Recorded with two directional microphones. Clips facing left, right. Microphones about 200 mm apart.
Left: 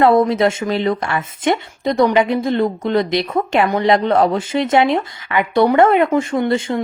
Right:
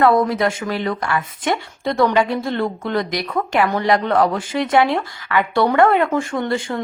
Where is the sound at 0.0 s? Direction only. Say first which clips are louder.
Left 3 dB; 25° left (ahead or behind).